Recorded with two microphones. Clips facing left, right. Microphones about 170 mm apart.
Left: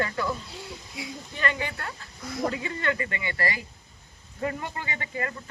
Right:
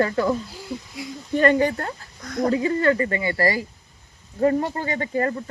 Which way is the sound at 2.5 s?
35° right (ahead or behind).